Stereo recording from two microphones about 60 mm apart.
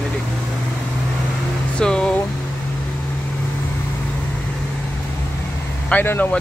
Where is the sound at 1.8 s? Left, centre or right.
Centre.